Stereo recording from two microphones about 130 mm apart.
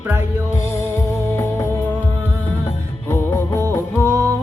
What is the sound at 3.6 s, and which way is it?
Music, 25° right (ahead or behind).